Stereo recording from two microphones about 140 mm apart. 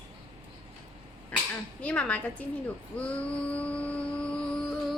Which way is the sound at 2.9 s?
10° left (ahead or behind).